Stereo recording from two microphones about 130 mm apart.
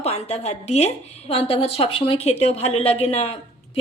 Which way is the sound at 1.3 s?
45° left (ahead or behind).